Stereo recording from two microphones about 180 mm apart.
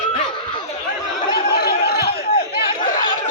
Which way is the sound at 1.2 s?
60° left (ahead or behind).